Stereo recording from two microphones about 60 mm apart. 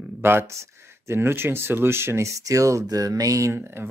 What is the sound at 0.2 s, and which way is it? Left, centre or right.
Speech, right.